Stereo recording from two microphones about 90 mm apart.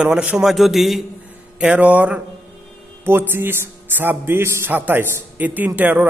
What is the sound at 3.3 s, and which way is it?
A man's voice, 25° right (ahead or behind).